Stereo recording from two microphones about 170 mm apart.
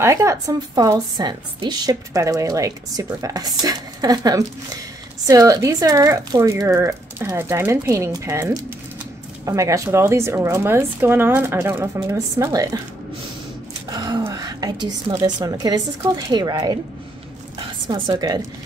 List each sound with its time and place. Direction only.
0.0 s a woman's voice: 15° right (ahead or behind)
13.8 s a woman's voice: 25° right (ahead or behind)
17.8 s a woman's voice: 25° right (ahead or behind)